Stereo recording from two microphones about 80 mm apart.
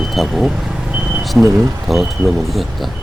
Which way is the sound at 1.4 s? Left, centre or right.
Centre.